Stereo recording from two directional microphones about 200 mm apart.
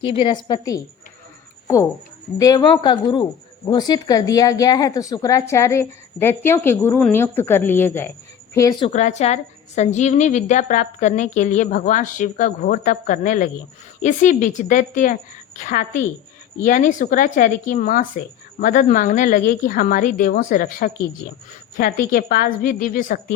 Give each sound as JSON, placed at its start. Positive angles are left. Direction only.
{"t": 0.0, "sound": "speech", "side_deg": 25}
{"t": 8.9, "sound": "a woman's voice", "side_deg": 35}